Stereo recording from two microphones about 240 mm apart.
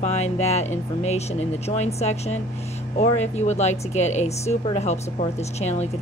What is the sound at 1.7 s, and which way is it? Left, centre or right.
A woman's voice, left.